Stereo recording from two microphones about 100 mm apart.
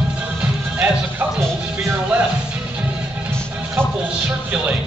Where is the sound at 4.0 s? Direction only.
15° right (ahead or behind).